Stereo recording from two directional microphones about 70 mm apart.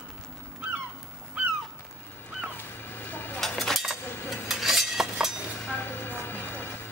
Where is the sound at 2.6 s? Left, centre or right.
Left.